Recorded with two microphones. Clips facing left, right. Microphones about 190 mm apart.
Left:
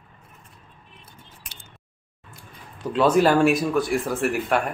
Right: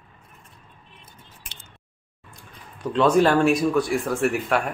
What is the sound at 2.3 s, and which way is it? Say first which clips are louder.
Speech: left 1 dB; 5° left (ahead or behind).